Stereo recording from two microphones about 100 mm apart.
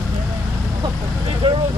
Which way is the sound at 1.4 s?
65° right (ahead or behind).